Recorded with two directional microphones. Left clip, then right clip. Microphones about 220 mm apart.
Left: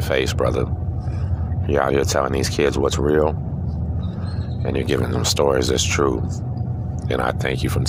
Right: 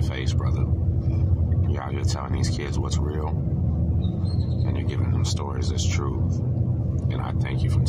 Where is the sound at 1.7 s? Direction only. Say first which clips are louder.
Left 17 dB; 40° left (ahead or behind).